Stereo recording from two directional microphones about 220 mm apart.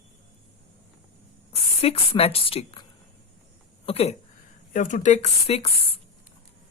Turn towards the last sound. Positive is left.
turn(degrees=25)  # may be behind; listen again after turning